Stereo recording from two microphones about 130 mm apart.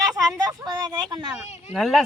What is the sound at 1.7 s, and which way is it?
Speech, centre (ahead or behind).